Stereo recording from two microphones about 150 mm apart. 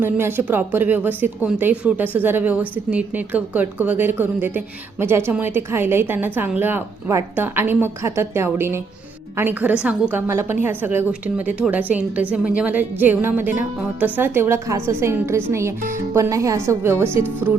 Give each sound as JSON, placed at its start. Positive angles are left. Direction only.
{"t": 0.0, "sound": "a woman's voice", "side_deg": -15}